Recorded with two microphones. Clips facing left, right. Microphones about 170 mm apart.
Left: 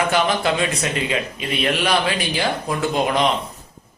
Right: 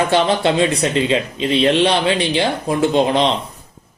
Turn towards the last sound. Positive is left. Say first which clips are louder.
# right 4 dB
turn(degrees=-30)  # may be behind; listen again after turning